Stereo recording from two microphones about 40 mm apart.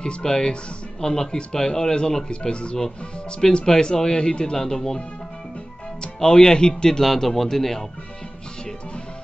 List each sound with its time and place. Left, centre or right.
0.2 s speech: centre
3.3 s speech: centre
6.2 s speech: centre